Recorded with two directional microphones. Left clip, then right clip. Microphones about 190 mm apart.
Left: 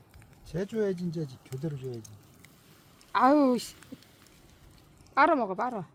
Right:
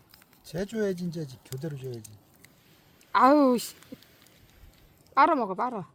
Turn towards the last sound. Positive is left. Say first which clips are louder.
# right 1 dB
turn(degrees=-45)  # may be behind; listen again after turning